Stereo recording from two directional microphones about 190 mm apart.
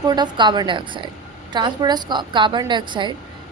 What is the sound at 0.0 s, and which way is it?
A woman's voice, 20° right (ahead or behind).